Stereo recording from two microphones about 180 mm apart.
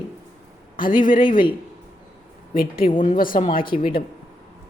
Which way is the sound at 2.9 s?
50° left (ahead or behind).